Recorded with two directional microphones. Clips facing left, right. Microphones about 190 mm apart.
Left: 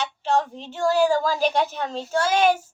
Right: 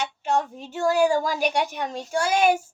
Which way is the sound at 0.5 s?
10° right (ahead or behind).